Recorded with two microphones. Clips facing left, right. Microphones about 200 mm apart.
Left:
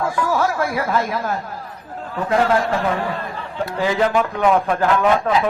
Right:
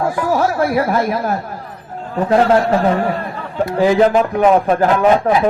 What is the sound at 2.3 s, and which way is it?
Speech, 40° right (ahead or behind).